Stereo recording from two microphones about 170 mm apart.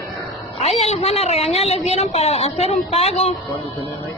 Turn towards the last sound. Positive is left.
turn(degrees=35)  # may be behind; listen again after turning